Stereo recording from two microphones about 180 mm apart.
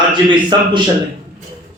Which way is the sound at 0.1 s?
25° right (ahead or behind).